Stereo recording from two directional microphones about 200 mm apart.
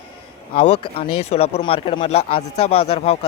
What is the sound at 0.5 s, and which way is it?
Speech, 30° left (ahead or behind).